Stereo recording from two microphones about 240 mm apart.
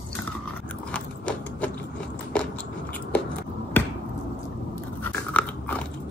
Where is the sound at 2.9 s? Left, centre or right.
Centre.